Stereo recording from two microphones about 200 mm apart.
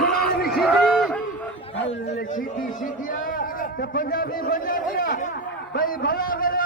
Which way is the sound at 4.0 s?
45° left (ahead or behind).